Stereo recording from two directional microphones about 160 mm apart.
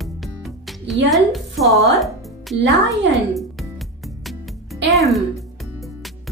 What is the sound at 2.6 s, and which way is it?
Music, 90° right.